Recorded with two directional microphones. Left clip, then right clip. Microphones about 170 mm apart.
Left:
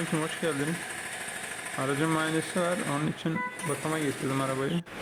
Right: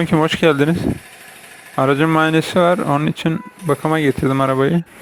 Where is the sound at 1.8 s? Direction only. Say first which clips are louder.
Right 14 dB; 65° right (ahead or behind).